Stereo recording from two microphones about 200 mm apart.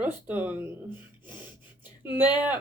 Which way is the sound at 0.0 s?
10° right (ahead or behind).